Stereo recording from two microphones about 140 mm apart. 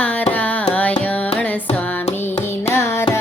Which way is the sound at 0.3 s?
10° left (ahead or behind).